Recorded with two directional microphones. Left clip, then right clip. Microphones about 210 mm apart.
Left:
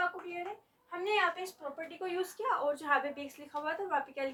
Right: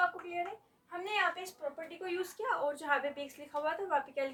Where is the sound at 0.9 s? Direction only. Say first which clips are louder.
Left 2 dB; 15° right (ahead or behind).